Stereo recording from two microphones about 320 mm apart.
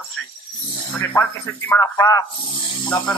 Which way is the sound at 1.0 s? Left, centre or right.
Centre.